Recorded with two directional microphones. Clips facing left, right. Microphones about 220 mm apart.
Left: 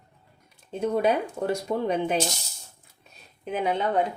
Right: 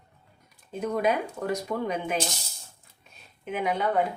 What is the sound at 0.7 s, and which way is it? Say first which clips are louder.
Speech: left 3 dB; 30° left (ahead or behind).